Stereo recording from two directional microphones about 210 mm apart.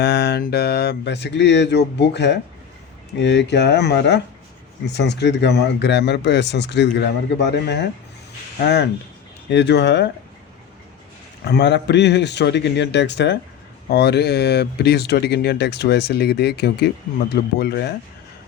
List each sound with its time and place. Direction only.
0.0 s speech: 50° left (ahead or behind)
11.4 s speech: 55° left (ahead or behind)